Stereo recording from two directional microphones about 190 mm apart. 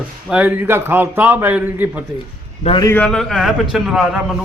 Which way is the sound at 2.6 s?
30° left (ahead or behind).